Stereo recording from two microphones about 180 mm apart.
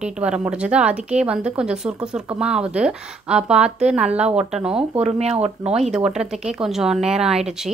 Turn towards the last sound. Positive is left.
turn(degrees=-5)  # may be behind; listen again after turning